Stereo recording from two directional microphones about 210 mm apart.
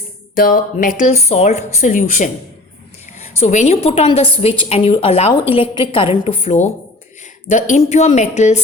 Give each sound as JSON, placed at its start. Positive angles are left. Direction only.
{"t": 0.3, "sound": "speech", "side_deg": 45}
{"t": 3.4, "sound": "a woman's voice", "side_deg": 35}